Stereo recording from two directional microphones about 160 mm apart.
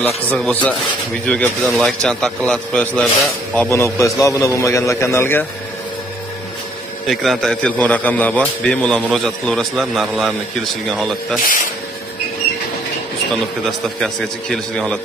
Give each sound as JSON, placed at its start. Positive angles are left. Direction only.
{"t": 0.1, "sound": "a man's voice", "side_deg": 5}
{"t": 3.7, "sound": "a man's voice", "side_deg": 20}
{"t": 7.1, "sound": "a man's voice", "side_deg": 0}
{"t": 11.4, "sound": "speech", "side_deg": 55}
{"t": 13.7, "sound": "a man's voice", "side_deg": 0}